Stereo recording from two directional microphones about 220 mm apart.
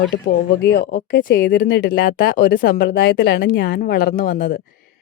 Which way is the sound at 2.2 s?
40° left (ahead or behind).